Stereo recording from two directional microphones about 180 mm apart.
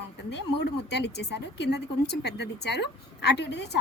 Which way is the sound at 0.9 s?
70° left (ahead or behind).